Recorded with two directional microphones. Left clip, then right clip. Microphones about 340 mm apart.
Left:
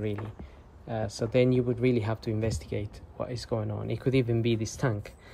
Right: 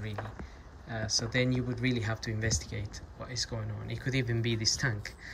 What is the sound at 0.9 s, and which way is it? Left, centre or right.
Speech, centre.